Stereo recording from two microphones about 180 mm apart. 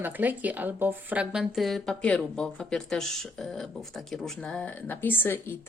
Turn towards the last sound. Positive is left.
turn(degrees=10)  # may be behind; listen again after turning